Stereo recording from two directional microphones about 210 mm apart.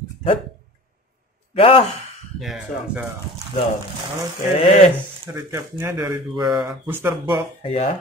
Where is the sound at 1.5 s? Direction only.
25° left (ahead or behind).